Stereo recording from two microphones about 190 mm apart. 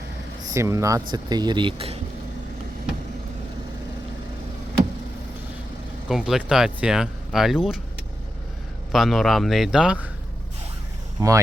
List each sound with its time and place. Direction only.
0.4 s speech: 15° right (ahead or behind)
6.1 s speech: centre (ahead or behind)
8.9 s speech: centre (ahead or behind)
11.2 s speech: 20° right (ahead or behind)